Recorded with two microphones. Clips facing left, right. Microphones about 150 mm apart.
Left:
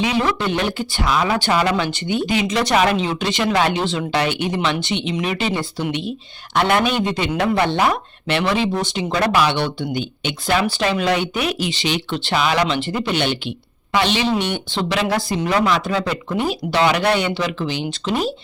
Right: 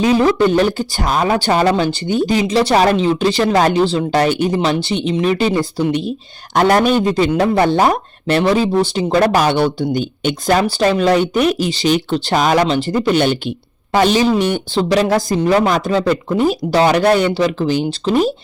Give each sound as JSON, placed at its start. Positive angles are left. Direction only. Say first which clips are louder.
{"t": 0.0, "sound": "speech", "louder": "right 7 dB", "side_deg": -40}